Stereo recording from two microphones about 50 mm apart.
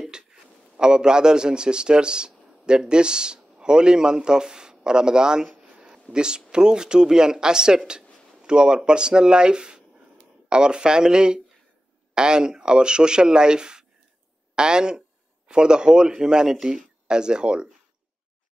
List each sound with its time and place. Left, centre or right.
0.0 s a man's voice: centre